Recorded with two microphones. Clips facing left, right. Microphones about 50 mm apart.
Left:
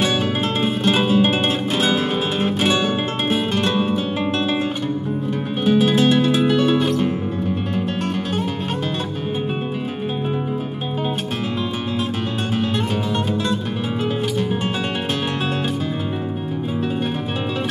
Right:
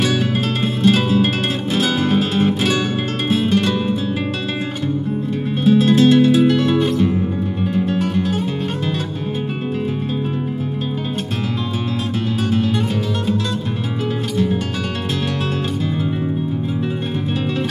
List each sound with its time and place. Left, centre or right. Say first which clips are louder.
0.0 s music: right 1 dB; left
5.7 s music: right 3 dB; centre
6.5 s music: right 1 dB; centre
7.7 s guitar: right 4 dB; centre
12.6 s music: right 2 dB; centre